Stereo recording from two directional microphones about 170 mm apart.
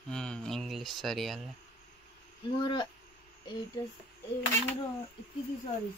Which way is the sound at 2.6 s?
25° left (ahead or behind).